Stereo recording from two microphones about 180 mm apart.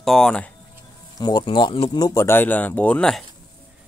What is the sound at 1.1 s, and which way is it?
Speech, 20° left (ahead or behind).